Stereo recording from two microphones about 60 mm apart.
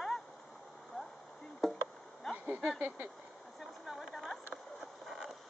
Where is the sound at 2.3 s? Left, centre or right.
Right.